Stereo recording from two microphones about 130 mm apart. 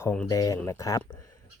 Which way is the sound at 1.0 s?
20° left (ahead or behind).